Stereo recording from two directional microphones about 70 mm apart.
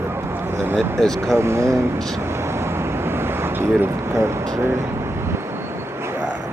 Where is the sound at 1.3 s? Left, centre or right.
Right.